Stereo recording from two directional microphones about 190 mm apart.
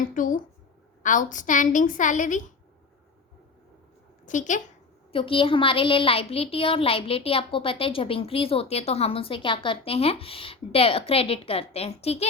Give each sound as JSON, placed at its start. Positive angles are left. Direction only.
{"t": 0.1, "sound": "a woman's voice", "side_deg": 45}
{"t": 4.3, "sound": "a woman's voice", "side_deg": 40}
{"t": 5.1, "sound": "a woman's voice", "side_deg": 25}